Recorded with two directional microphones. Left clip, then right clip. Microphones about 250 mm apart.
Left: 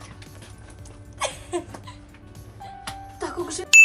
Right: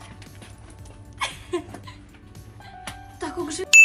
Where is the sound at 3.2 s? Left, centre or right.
Left.